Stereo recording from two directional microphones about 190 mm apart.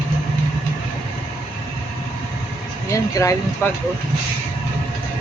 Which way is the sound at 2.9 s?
15° left (ahead or behind).